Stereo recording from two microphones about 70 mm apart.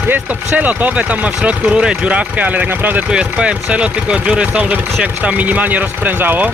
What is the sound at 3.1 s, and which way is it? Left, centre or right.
Speech, centre.